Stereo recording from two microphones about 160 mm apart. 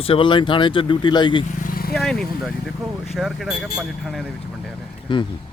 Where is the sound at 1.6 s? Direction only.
65° left (ahead or behind).